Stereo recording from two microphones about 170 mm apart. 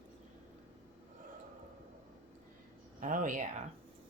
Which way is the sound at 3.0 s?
50° right (ahead or behind).